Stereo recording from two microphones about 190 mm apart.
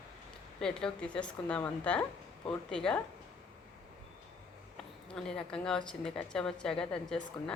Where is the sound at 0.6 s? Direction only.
5° left (ahead or behind).